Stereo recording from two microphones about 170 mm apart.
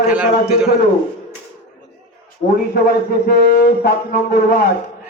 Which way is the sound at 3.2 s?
65° left (ahead or behind).